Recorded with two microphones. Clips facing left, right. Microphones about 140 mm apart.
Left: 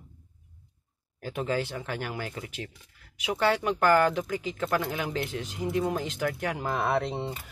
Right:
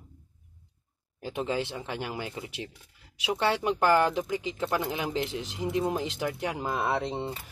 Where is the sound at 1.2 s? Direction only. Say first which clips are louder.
Left 1 dB; 20° right (ahead or behind).